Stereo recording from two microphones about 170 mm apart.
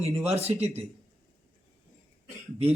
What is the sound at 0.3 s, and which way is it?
Speech, 40° right (ahead or behind).